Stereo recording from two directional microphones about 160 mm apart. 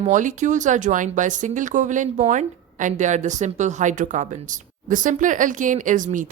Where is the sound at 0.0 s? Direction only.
50° right (ahead or behind).